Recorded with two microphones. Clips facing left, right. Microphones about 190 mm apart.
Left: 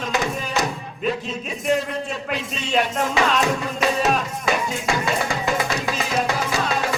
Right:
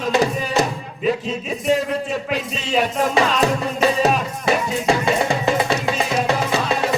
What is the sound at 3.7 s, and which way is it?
Music, 30° right (ahead or behind).